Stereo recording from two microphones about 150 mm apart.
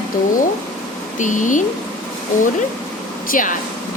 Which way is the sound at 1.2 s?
60° left (ahead or behind).